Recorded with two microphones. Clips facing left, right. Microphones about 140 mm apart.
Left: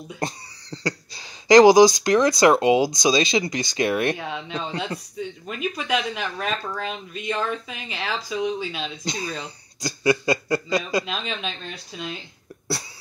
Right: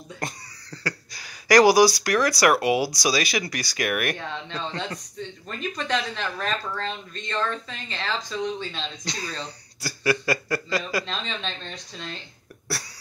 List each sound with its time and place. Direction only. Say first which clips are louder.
0.2 s speech: left 4 dB; 25° left (ahead or behind)
4.2 s speech: left 2 dB; 10° left (ahead or behind)
9.1 s speech: left 3 dB; 20° left (ahead or behind)
11.1 s speech: left 2 dB; 10° left (ahead or behind)